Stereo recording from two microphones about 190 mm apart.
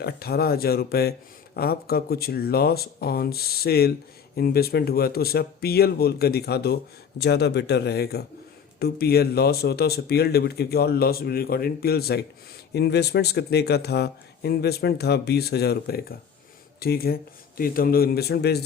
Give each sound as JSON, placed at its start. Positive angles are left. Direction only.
{"t": 0.0, "sound": "a man's voice", "side_deg": 55}